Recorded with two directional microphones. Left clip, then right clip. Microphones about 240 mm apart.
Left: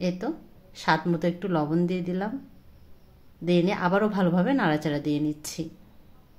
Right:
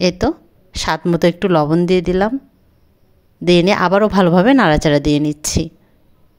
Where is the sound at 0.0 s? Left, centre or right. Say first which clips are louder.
Right 14 dB; right.